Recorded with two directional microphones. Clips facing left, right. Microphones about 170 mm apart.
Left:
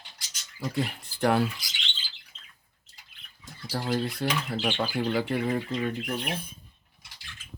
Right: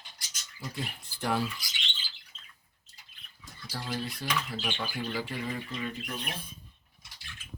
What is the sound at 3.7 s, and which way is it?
Speech, 60° left (ahead or behind).